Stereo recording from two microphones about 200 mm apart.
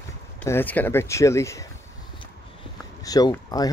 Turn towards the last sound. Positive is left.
turn(degrees=20)  # may be behind; listen again after turning